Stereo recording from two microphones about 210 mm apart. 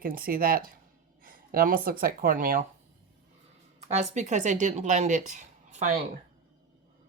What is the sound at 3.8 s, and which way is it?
Speech, 30° right (ahead or behind).